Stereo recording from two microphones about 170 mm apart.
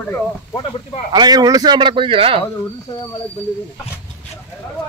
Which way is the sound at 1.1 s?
25° right (ahead or behind).